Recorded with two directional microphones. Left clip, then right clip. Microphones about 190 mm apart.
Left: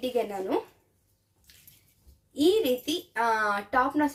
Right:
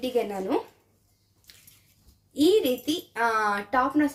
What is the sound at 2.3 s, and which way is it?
A woman's voice, centre (ahead or behind).